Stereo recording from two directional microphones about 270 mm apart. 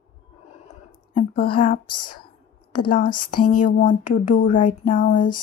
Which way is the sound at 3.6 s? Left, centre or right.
Left.